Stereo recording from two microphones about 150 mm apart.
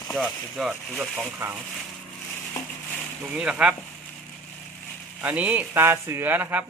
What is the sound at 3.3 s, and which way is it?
Speech, 5° right (ahead or behind).